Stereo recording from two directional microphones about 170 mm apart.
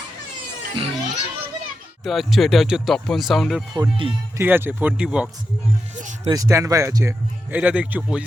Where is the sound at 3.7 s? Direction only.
25° right (ahead or behind).